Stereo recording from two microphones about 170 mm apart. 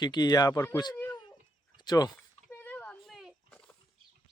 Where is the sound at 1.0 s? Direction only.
20° left (ahead or behind).